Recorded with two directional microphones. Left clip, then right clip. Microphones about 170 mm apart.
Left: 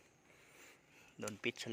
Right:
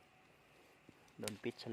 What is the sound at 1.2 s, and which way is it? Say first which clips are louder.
Speech: left 3 dB; 20° right (ahead or behind).